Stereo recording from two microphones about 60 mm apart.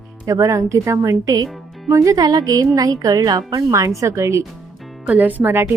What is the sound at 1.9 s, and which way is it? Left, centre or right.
Speech, right.